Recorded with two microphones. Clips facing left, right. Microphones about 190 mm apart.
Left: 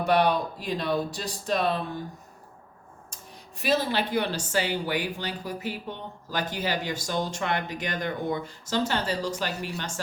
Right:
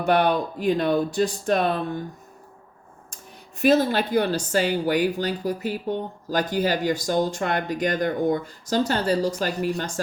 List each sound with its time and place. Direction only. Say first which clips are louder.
0.1 s speech: right 3 dB; 50° right (ahead or behind)
3.6 s speech: right 7 dB; 45° right (ahead or behind)